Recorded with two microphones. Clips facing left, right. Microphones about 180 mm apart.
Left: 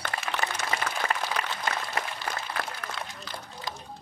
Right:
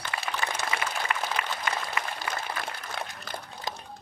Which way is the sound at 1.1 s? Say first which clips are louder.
Even; 35° left (ahead or behind).